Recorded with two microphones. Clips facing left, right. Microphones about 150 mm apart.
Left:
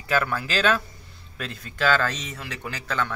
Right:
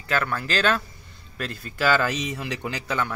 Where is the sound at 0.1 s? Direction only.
5° left (ahead or behind).